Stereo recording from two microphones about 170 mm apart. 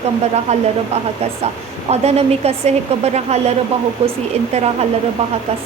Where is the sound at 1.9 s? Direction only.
40° right (ahead or behind).